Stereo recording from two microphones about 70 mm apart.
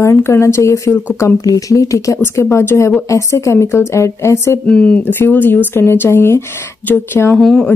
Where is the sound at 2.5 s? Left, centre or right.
Left.